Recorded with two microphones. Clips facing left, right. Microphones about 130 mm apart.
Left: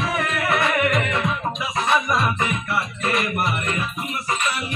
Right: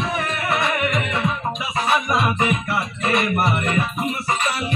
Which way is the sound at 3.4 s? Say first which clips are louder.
Right 4 dB; 40° right (ahead or behind).